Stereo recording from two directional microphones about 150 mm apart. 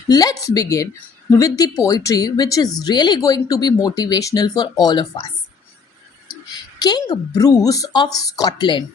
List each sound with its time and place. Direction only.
0.1 s speech: 25° left (ahead or behind)
6.7 s speech: 30° left (ahead or behind)